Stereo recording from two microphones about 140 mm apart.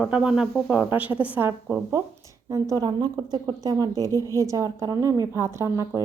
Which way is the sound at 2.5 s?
25° right (ahead or behind).